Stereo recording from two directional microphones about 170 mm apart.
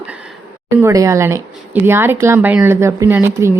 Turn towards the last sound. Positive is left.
turn(degrees=-10)  # may be behind; listen again after turning